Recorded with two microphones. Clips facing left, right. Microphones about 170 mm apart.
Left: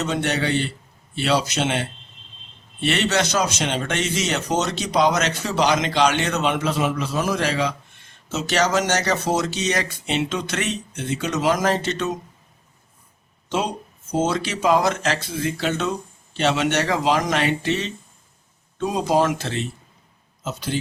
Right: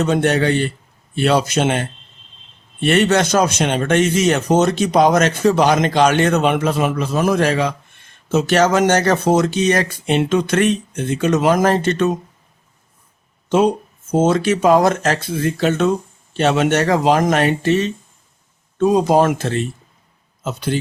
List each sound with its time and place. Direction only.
0.0 s speech: 50° right (ahead or behind)
13.5 s speech: 50° right (ahead or behind)